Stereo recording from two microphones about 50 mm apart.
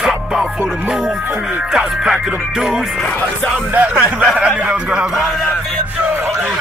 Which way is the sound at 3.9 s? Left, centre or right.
Right.